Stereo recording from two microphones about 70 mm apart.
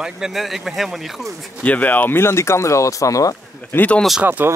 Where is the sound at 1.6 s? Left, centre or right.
Left.